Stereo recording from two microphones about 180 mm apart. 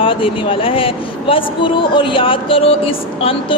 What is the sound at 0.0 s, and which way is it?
Speech, 30° left (ahead or behind).